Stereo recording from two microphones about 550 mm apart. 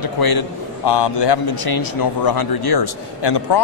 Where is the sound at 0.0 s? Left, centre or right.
Left.